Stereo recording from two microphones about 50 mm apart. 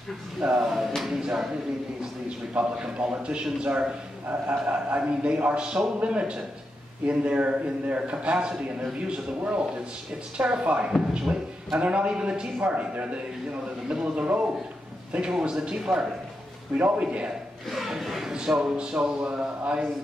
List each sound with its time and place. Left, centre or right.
0.4 s music: centre
0.7 s a sound: centre
1.2 s music: centre
2.2 s a man's voice: right
3.6 s music: centre
4.3 s a man's voice: right
15.1 s music: centre
16.7 s a man's voice: right
17.6 s a sound: centre
18.5 s music: centre